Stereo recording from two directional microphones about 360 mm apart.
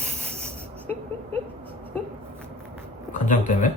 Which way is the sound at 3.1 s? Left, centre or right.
Left.